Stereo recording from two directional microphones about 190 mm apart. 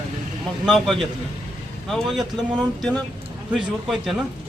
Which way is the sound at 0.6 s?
Centre (ahead or behind).